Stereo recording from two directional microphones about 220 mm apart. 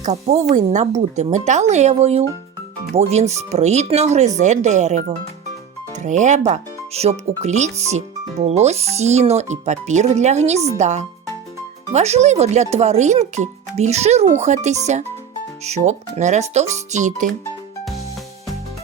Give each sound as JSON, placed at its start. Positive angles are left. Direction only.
{"t": 0.0, "sound": "speech", "side_deg": -30}